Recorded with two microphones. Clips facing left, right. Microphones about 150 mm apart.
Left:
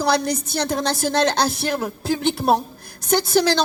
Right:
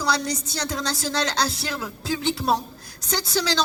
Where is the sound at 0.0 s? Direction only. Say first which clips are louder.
Left 5 dB; 55° left (ahead or behind).